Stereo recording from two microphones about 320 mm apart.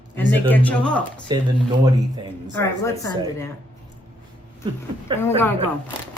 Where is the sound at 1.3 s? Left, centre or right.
Centre.